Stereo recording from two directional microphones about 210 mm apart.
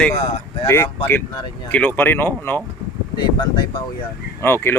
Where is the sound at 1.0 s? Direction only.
15° left (ahead or behind).